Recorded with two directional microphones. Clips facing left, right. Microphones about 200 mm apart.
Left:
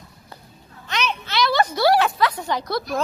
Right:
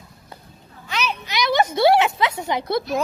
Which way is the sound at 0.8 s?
5° right (ahead or behind).